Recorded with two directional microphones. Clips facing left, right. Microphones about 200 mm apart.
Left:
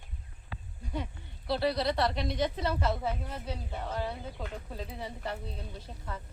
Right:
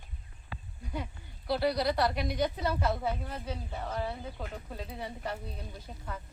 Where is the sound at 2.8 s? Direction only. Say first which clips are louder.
Even; centre (ahead or behind).